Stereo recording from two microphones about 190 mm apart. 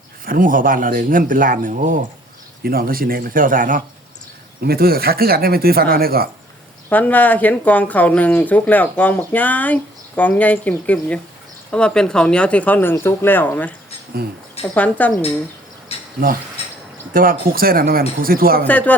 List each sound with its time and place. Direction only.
0.3 s speech: 45° right (ahead or behind)
6.9 s speech: 10° left (ahead or behind)
14.8 s speech: 10° left (ahead or behind)
15.9 s mechanisms: 30° left (ahead or behind)
17.2 s speech: 50° right (ahead or behind)
18.7 s speech: 10° left (ahead or behind)